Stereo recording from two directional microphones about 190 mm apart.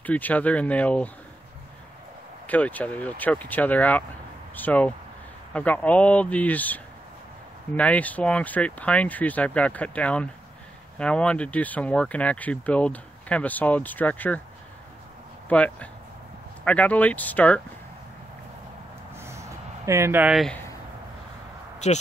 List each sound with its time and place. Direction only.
0.0 s speech: 10° left (ahead or behind)
2.4 s speech: 10° left (ahead or behind)
15.4 s speech: 5° left (ahead or behind)
19.1 s a sound: 15° right (ahead or behind)
19.9 s speech: 15° right (ahead or behind)
21.8 s speech: 35° left (ahead or behind)